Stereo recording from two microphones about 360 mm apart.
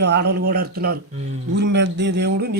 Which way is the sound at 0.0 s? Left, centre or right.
Right.